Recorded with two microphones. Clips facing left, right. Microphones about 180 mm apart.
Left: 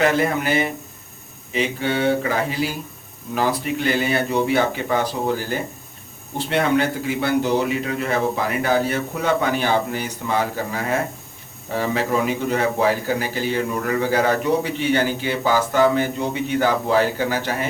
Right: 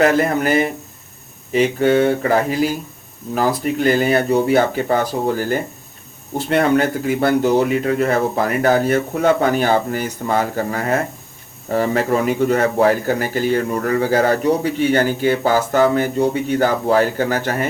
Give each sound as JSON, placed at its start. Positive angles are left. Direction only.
{"t": 0.0, "sound": "speech", "side_deg": -45}